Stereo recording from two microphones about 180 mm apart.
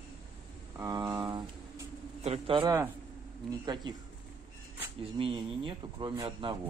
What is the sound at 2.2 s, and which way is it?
Bird, 35° right (ahead or behind).